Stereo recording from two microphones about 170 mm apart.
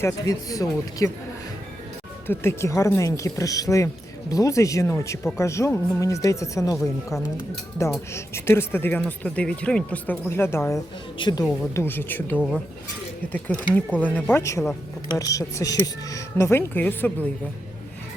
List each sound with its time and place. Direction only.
0.0 s speech: 20° left (ahead or behind)
2.2 s speech: 15° left (ahead or behind)
11.2 s speech: 25° left (ahead or behind)
11.7 s speech: 15° left (ahead or behind)